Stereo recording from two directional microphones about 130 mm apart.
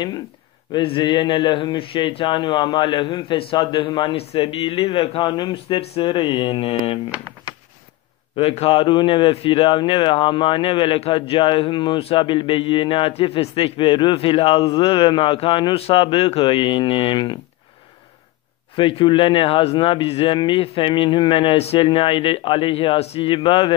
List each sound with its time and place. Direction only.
0.7 s a man's voice: 40° left (ahead or behind)
8.4 s a man's voice: 45° left (ahead or behind)
18.8 s a man's voice: 40° left (ahead or behind)